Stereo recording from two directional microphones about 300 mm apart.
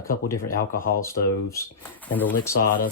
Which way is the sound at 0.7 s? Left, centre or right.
Left.